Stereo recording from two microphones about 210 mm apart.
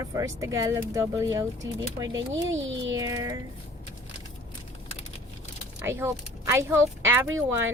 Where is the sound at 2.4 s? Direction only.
60° right (ahead or behind).